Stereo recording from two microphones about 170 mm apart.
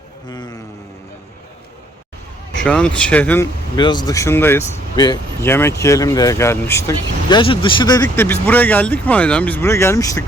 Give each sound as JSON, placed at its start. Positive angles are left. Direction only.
{"t": 0.3, "sound": "a sound", "side_deg": 25}
{"t": 2.6, "sound": "speech", "side_deg": 5}
{"t": 3.8, "sound": "speech", "side_deg": 25}